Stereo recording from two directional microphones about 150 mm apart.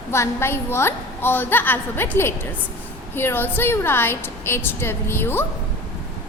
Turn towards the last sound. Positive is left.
turn(degrees=15)  # may be behind; listen again after turning